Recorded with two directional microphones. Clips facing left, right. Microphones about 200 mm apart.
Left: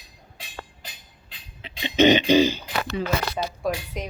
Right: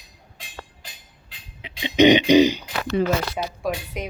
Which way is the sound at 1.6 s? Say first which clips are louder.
Right 3 dB; 15° right (ahead or behind).